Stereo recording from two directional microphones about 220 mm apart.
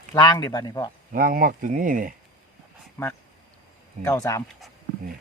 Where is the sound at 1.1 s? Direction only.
40° right (ahead or behind).